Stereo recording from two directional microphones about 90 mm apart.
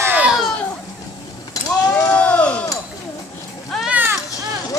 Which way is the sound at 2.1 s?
15° left (ahead or behind).